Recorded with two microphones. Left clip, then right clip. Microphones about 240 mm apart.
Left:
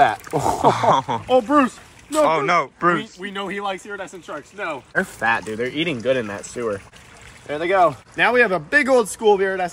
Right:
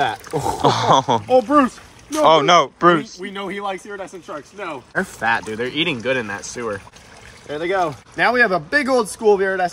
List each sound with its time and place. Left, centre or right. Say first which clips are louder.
0.3 s speech: left 1 dB; left
0.6 s speech: right 2 dB; centre
1.2 s speech: right 2 dB; centre
2.2 s speech: right 7 dB; centre
3.2 s speech: even; centre
8.2 s speech: right 1 dB; centre